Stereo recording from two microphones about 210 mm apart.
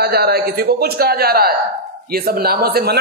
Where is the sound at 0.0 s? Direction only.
50° right (ahead or behind).